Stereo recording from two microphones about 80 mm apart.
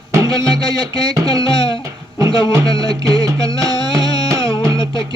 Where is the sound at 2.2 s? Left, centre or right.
Right.